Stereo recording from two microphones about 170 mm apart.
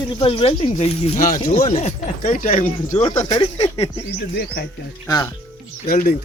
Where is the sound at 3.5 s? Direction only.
40° left (ahead or behind).